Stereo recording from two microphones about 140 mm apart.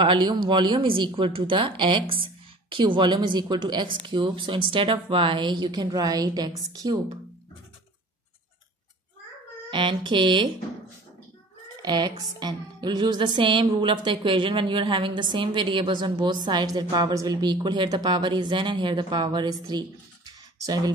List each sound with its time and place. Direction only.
0.0 s speech: 35° right (ahead or behind)
9.7 s speech: 35° right (ahead or behind)
11.8 s speech: 30° right (ahead or behind)
20.2 s a sound: 30° right (ahead or behind)